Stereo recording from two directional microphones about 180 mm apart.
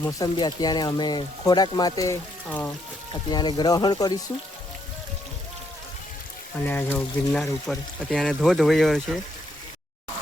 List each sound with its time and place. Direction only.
0.0 s speech: 20° left (ahead or behind)
2.5 s speech: 10° left (ahead or behind)
3.2 s speech: 25° left (ahead or behind)
6.7 s speech: 10° left (ahead or behind)